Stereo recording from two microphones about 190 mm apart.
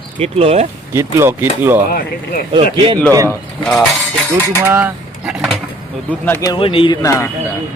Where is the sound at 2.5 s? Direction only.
25° right (ahead or behind).